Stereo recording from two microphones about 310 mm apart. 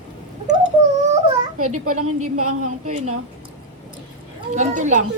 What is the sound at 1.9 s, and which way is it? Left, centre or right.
Speech, right.